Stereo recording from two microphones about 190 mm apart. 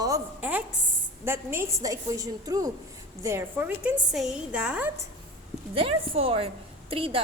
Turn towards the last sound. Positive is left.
turn(degrees=-30)  # may be behind; listen again after turning